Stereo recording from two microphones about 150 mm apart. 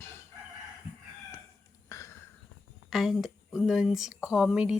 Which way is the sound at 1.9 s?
20° left (ahead or behind).